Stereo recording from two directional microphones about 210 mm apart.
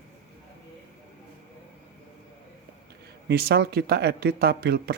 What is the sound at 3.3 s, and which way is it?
Speech, 50° right (ahead or behind).